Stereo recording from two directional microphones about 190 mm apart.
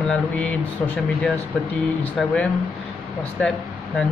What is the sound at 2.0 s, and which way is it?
Speech, 5° left (ahead or behind).